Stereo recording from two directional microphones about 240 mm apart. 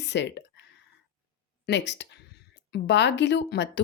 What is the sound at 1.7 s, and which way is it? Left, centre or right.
Speech, left.